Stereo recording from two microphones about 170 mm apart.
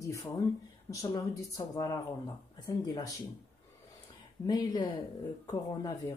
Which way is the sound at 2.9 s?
20° left (ahead or behind).